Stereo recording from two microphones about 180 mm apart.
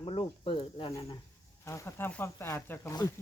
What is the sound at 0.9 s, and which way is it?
Speech, 20° left (ahead or behind).